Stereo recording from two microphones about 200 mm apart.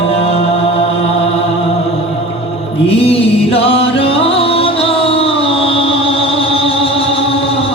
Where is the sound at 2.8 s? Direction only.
30° left (ahead or behind).